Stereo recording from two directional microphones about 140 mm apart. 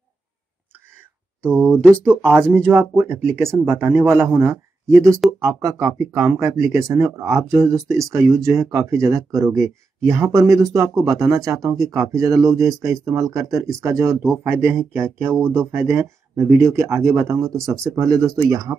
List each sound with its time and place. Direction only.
1.4 s speech: 15° right (ahead or behind)